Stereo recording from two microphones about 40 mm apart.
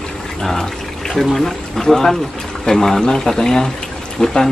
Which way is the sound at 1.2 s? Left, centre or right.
Centre.